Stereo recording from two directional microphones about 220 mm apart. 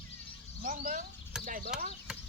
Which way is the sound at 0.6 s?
35° right (ahead or behind).